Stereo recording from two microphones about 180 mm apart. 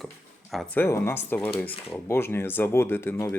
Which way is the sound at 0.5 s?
10° left (ahead or behind).